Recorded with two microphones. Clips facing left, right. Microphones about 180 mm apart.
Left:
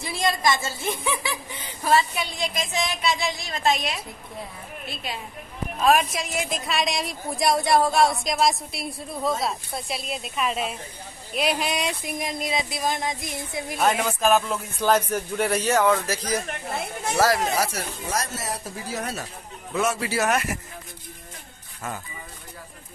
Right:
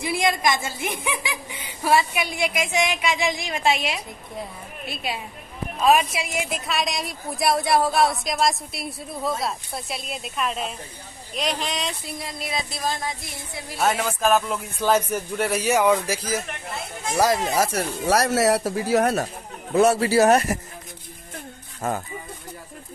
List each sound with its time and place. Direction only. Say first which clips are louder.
0.0 s speech: right 2 dB; 15° right (ahead or behind)
5.8 s speech: right 1 dB; centre (ahead or behind)
11.3 s a sound: left 2 dB; 10° left (ahead or behind)
12.4 s speech: even; 15° left (ahead or behind)
14.5 s speech: right 1 dB; 10° right (ahead or behind)
17.2 s speech: right 1 dB; 20° right (ahead or behind)
17.6 s speech: right 4 dB; 65° right (ahead or behind)
19.7 s speech: right 8 dB; 35° right (ahead or behind)